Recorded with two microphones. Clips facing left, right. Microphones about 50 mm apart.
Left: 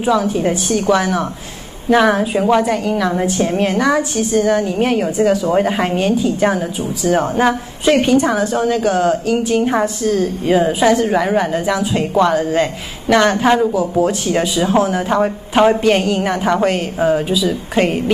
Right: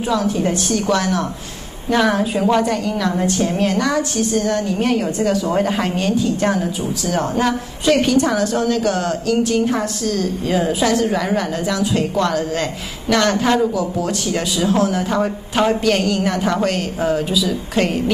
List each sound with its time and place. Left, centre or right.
0.0 s a woman's voice: centre
7.1 s a woman's voice: left